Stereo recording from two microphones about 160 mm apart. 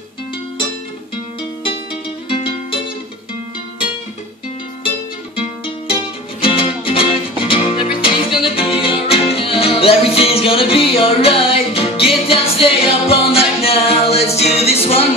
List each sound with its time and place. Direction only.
2.2 s music: 35° left (ahead or behind)
6.4 s music: 35° left (ahead or behind)